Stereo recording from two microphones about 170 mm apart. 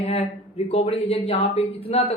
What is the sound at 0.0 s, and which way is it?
Speech, 40° left (ahead or behind).